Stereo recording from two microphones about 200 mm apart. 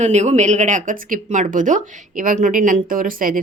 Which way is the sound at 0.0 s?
35° right (ahead or behind).